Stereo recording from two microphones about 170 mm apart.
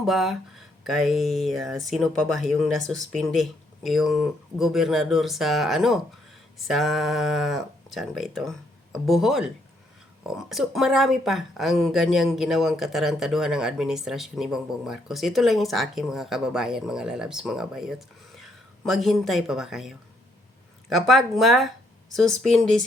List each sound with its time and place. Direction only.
0.0 s speech: centre (ahead or behind)